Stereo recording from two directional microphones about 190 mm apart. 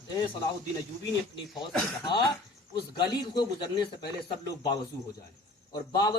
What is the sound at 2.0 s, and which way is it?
A man's voice, 25° left (ahead or behind).